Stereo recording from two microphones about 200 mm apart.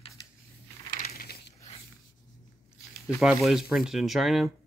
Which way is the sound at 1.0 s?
50° left (ahead or behind).